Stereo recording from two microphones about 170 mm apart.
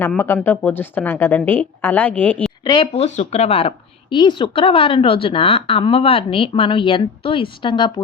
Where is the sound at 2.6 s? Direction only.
35° left (ahead or behind).